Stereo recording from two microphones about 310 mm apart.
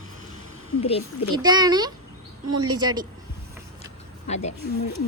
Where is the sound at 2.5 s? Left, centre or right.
Right.